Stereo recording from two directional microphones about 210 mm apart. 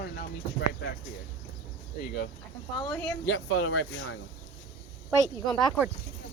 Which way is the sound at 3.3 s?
55° left (ahead or behind).